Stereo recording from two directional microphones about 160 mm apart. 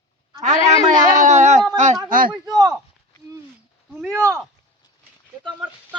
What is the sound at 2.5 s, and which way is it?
Speech, 25° right (ahead or behind).